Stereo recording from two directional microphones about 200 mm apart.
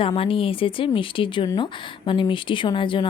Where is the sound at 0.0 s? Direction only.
25° left (ahead or behind).